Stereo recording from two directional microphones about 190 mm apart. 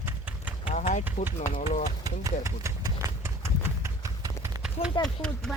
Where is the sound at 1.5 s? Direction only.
40° left (ahead or behind).